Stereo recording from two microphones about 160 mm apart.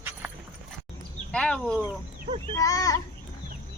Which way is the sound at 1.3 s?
5° left (ahead or behind).